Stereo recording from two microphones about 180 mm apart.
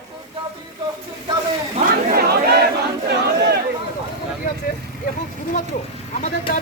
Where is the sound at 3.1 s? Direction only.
70° right (ahead or behind).